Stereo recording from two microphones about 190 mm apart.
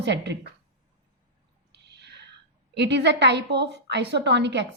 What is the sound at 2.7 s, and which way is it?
A woman's voice, 65° right (ahead or behind).